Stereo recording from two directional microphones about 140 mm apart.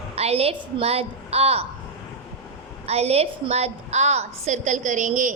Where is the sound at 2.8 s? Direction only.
45° right (ahead or behind); by 5.3 s 65° right (ahead or behind).